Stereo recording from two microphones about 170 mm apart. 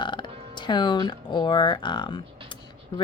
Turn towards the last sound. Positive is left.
turn(degrees=30)  # may be behind; listen again after turning